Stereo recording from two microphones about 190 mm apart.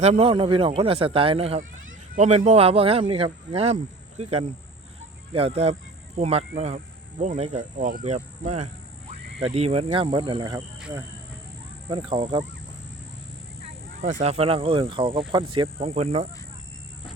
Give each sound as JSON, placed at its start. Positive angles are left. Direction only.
{"t": 0.0, "sound": "speech", "side_deg": -35}
{"t": 11.9, "sound": "speech", "side_deg": -25}
{"t": 14.0, "sound": "speech", "side_deg": -35}